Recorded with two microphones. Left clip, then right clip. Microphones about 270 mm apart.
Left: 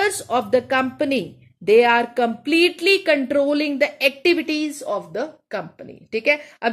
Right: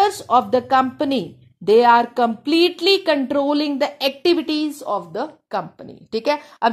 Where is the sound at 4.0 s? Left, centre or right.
Right.